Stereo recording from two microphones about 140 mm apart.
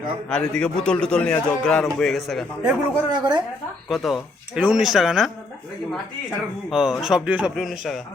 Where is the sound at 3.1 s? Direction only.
30° right (ahead or behind).